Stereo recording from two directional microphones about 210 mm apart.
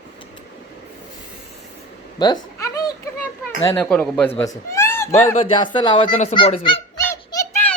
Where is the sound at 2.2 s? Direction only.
20° left (ahead or behind).